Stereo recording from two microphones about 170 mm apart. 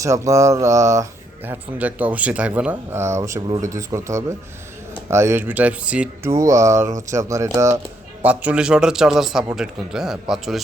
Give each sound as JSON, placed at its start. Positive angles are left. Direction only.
{"t": 0.0, "sound": "mantra", "side_deg": -20}
{"t": 1.5, "sound": "speech", "side_deg": -10}
{"t": 6.3, "sound": "a man's voice", "side_deg": -20}